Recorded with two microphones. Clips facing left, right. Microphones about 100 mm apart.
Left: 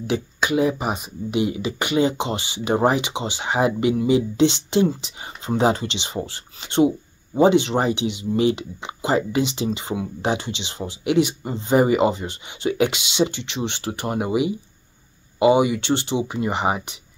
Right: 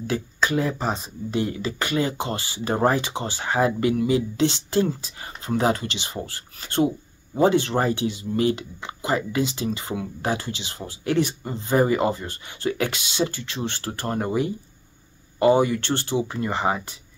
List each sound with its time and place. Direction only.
0.0 s speech: 20° left (ahead or behind)